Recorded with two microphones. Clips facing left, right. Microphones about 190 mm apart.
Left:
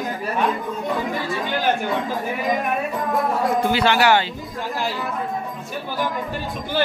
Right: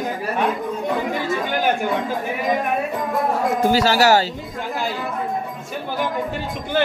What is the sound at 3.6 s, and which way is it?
Speech, 40° right (ahead or behind).